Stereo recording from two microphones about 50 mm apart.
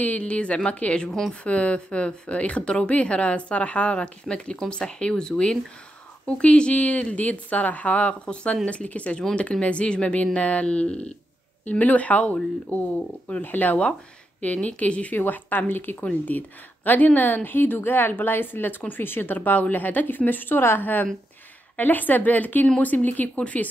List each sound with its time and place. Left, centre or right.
0.0 s a woman's voice: left
14.4 s a woman's voice: left
15.1 s a woman's voice: left